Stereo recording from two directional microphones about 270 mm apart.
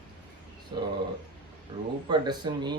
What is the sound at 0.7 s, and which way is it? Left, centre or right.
Speech, centre.